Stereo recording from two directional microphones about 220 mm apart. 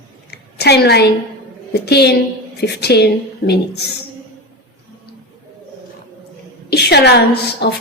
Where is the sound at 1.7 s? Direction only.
50° left (ahead or behind).